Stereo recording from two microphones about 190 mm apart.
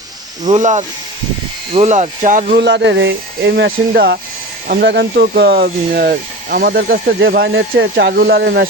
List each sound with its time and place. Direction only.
0.4 s speech: 40° right (ahead or behind)
2.6 s speech: 65° right (ahead or behind)